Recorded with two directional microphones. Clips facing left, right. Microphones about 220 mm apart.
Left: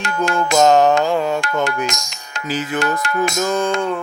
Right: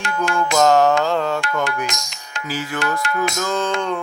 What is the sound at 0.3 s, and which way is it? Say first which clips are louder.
Music: left 2 dB; 20° left (ahead or behind).